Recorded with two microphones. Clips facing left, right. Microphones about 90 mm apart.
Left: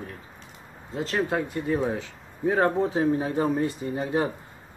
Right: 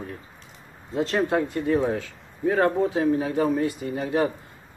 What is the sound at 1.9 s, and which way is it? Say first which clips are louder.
A man's voice: right 3 dB; 20° left (ahead or behind).